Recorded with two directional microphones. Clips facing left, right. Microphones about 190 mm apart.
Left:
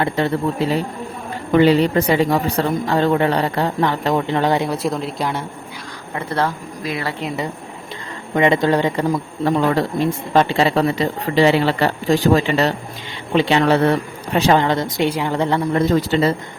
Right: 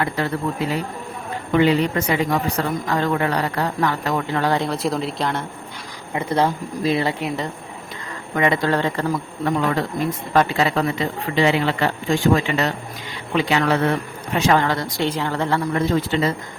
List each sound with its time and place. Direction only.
0.0 s a woman's voice: 25° left (ahead or behind)
4.7 s a woman's voice: centre (ahead or behind)
6.1 s speech: 15° right (ahead or behind)
7.3 s speech: 10° left (ahead or behind)
8.4 s speech: 20° left (ahead or behind)
9.4 s speech: 30° left (ahead or behind)
14.5 s a woman's voice: 20° left (ahead or behind)
16.0 s speech: 35° left (ahead or behind)